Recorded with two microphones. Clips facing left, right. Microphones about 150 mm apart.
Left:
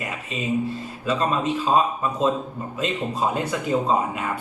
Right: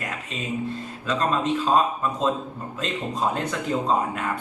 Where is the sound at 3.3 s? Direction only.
10° left (ahead or behind).